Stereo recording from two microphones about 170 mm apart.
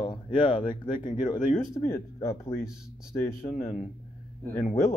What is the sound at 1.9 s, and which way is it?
Speech, 15° left (ahead or behind).